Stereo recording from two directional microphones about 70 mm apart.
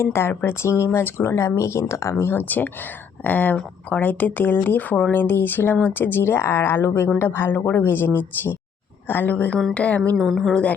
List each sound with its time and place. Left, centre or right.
0.0 s speech: left
1.4 s speech: left
2.3 s speech: left
10.2 s speech: centre
10.5 s speech: centre